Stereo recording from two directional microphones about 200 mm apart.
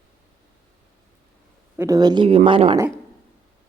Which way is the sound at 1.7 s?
15° right (ahead or behind).